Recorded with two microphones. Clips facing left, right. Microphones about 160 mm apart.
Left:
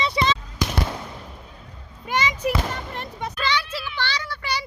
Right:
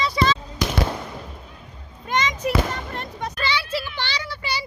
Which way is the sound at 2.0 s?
10° left (ahead or behind).